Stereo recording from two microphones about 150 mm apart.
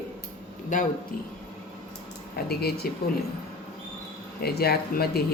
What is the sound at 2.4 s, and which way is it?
Speech, 90° left.